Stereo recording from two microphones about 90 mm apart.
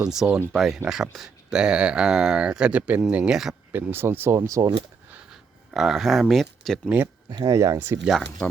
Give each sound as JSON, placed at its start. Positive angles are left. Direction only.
{"t": 0.0, "sound": "speech", "side_deg": -5}
{"t": 3.7, "sound": "speech", "side_deg": -20}
{"t": 4.4, "sound": "speech", "side_deg": -40}
{"t": 5.3, "sound": "speech", "side_deg": -5}
{"t": 6.8, "sound": "speech", "side_deg": -20}
{"t": 7.4, "sound": "speech", "side_deg": -40}
{"t": 8.1, "sound": "speech", "side_deg": 5}